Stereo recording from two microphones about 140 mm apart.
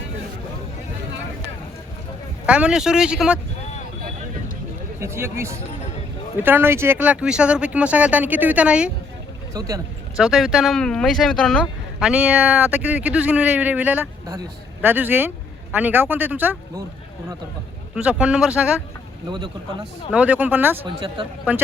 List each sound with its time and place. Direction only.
2.5 s speech: 5° right (ahead or behind)
4.9 s speech: 20° right (ahead or behind)
9.5 s speech: 25° right (ahead or behind)
10.2 s speech: 5° right (ahead or behind)
11.9 s speech: 5° right (ahead or behind)
17.9 s speech: 5° right (ahead or behind)
20.1 s speech: 10° right (ahead or behind)
20.8 s speech: 35° right (ahead or behind)
21.5 s speech: 10° right (ahead or behind)